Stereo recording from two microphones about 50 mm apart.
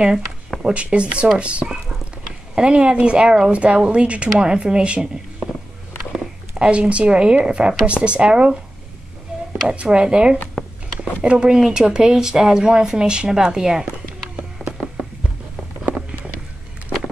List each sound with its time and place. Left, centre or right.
0.6 s a woman's voice: right
6.1 s zipper: centre
7.4 s a woman's voice: right
9.7 s a woman's voice: centre